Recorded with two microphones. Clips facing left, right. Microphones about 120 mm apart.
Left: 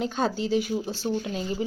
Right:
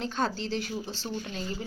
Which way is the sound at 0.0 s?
5° left (ahead or behind).